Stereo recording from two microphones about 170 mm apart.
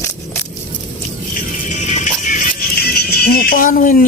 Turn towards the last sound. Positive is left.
turn(degrees=55)  # may be behind; listen again after turning